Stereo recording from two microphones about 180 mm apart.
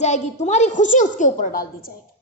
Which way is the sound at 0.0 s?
40° left (ahead or behind).